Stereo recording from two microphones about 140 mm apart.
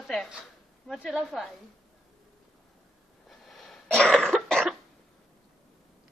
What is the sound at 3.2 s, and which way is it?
Cough, centre (ahead or behind).